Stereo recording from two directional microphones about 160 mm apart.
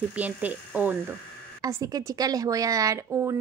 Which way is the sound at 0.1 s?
10° right (ahead or behind).